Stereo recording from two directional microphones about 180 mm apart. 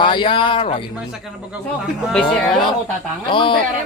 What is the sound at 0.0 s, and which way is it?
Speech, 25° left (ahead or behind).